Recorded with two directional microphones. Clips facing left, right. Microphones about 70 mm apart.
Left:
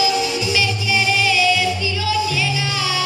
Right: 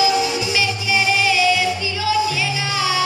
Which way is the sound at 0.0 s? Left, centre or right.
Centre.